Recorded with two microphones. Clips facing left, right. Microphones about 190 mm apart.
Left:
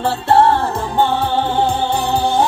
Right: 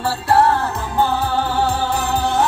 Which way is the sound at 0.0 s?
25° left (ahead or behind).